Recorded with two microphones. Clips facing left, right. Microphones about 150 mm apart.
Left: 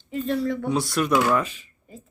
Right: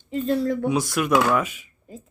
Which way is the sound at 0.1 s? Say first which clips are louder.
Right 2 dB; 40° right (ahead or behind).